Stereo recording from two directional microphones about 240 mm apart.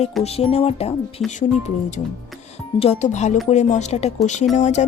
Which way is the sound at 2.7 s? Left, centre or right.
Left.